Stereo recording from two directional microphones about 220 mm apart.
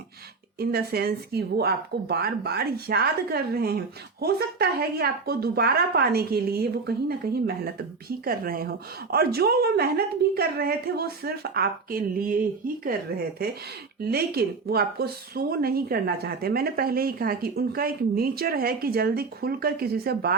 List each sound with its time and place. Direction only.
0.6 s speech: 45° right (ahead or behind)